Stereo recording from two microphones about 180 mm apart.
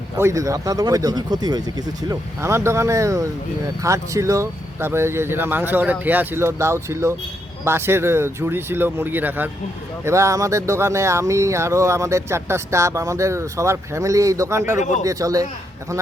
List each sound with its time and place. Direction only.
0.2 s speech: 15° right (ahead or behind)